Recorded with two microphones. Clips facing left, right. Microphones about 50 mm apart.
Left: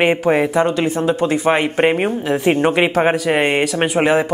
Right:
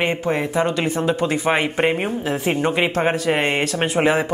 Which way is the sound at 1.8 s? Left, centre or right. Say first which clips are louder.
Left 4 dB; left.